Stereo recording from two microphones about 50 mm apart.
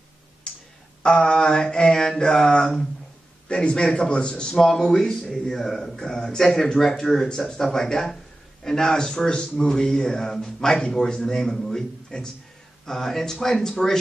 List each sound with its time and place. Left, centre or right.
1.0 s a man's voice: centre